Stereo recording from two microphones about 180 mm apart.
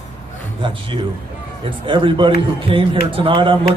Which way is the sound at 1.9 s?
25° right (ahead or behind).